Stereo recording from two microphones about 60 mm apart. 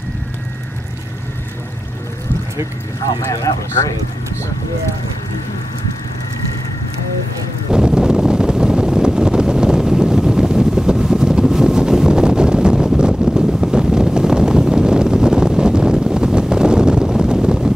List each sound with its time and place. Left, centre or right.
3.0 s speech: left
7.7 s wind noise: centre